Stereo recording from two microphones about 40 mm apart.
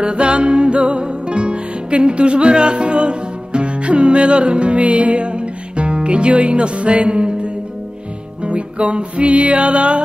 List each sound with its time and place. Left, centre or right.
0.0 s music: right